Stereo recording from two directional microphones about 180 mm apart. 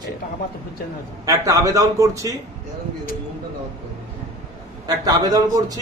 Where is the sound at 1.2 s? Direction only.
20° right (ahead or behind).